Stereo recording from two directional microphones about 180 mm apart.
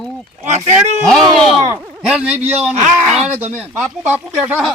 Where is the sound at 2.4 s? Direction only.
5° right (ahead or behind).